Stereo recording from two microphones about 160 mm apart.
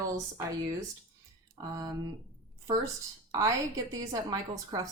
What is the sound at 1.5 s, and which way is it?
Speech, 25° right (ahead or behind).